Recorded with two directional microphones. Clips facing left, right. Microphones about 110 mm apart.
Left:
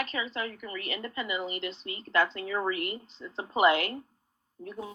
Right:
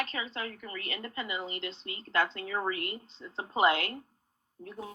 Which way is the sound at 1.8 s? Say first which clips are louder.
Left 3 dB; 25° left (ahead or behind).